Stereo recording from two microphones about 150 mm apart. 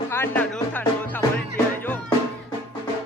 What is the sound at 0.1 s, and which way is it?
Music, 15° left (ahead or behind).